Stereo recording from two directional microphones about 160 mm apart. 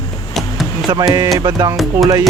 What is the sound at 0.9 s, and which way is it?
Music, 20° right (ahead or behind).